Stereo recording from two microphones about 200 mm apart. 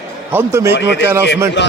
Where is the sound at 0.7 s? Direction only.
60° left (ahead or behind).